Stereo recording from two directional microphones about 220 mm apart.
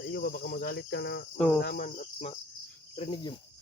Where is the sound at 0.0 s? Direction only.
40° left (ahead or behind); by 3.3 s 20° left (ahead or behind).